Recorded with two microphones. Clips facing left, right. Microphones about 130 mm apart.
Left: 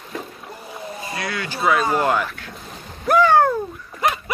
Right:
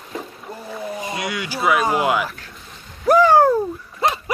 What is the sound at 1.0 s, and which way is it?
Speech, 20° right (ahead or behind).